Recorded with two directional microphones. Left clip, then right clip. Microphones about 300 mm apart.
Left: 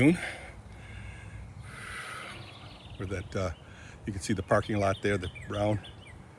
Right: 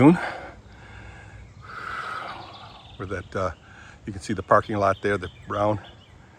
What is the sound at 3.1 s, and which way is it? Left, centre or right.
Speech, centre.